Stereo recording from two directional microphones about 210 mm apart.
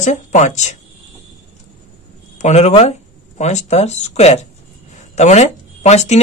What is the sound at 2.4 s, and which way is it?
Speech, 30° left (ahead or behind).